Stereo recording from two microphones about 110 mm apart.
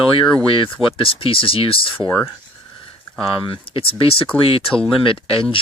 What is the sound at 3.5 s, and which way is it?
Speech, 55° left (ahead or behind).